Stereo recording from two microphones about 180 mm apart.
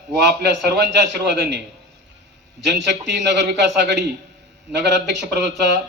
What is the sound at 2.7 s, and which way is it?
A man's voice, 75° right (ahead or behind).